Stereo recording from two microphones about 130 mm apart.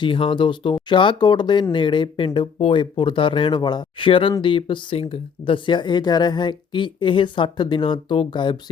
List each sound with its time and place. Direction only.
0.0 s speech: 40° left (ahead or behind)